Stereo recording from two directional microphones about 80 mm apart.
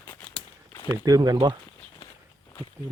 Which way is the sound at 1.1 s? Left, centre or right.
Right.